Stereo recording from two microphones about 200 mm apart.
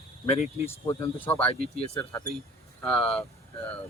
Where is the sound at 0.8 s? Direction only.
10° left (ahead or behind).